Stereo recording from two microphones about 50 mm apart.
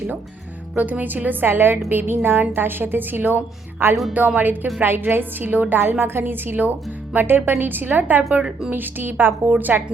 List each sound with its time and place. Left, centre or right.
0.8 s a woman's voice: right
4.4 s a woman's voice: right